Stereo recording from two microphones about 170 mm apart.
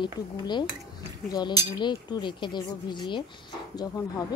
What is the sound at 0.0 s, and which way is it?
Speech, 25° left (ahead or behind).